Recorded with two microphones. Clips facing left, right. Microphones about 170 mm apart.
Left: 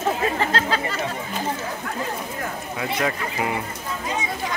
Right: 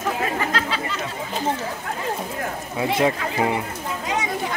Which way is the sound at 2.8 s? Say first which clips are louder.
Right 5 dB; 25° right (ahead or behind).